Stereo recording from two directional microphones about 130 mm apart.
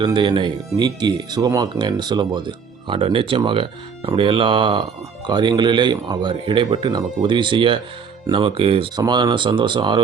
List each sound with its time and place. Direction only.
0.0 s speech: 40° right (ahead or behind)
9.0 s speech: 35° right (ahead or behind)